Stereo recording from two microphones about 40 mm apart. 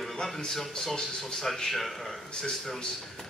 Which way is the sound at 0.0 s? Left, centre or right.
Centre.